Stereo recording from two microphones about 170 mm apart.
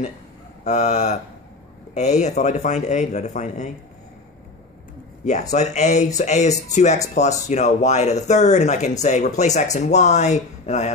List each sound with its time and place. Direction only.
0.7 s a man's voice: 45° left (ahead or behind)
5.2 s a man's voice: 45° left (ahead or behind)